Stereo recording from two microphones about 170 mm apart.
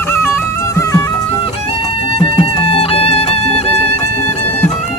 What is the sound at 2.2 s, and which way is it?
Music, 30° left (ahead or behind).